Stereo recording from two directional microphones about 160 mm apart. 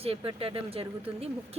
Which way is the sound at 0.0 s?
35° right (ahead or behind).